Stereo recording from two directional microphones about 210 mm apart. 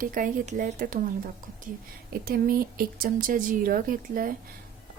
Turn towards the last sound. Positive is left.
turn(degrees=-40)  # may be behind; listen again after turning